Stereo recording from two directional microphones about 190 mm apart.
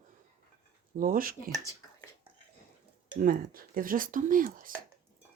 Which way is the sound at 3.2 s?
50° right (ahead or behind).